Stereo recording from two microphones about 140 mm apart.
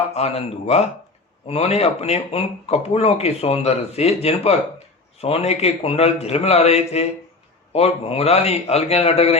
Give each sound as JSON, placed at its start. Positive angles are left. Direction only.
{"t": 0.1, "sound": "speech", "side_deg": 50}